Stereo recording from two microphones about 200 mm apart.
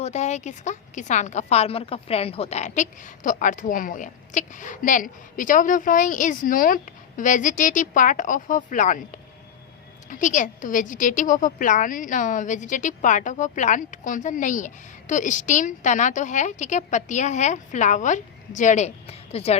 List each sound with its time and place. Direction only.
0.0 s a woman's voice: 35° left (ahead or behind)